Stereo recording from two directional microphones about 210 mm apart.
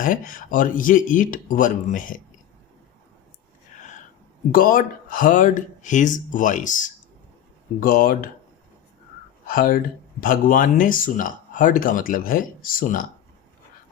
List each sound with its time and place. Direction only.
0.0 s speech: 40° left (ahead or behind)
4.5 s speech: 40° left (ahead or behind)
9.5 s speech: 40° left (ahead or behind)